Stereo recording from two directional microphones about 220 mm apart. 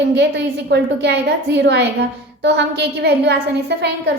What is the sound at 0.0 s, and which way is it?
A woman's voice, 50° right (ahead or behind).